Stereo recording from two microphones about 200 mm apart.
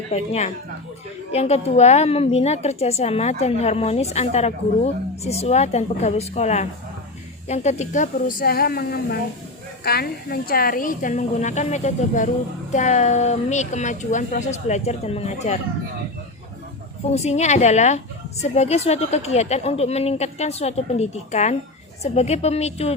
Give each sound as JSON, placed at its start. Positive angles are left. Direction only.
{"t": 0.1, "sound": "a woman's voice", "side_deg": 30}
{"t": 17.1, "sound": "a woman's voice", "side_deg": 35}